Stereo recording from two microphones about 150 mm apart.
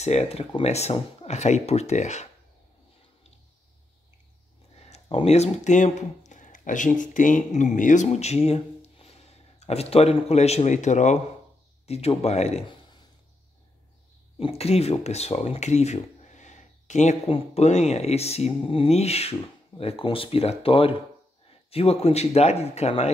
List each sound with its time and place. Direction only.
0.0 s speech: 45° left (ahead or behind)
4.7 s speech: 45° left (ahead or behind)
14.4 s speech: 45° left (ahead or behind)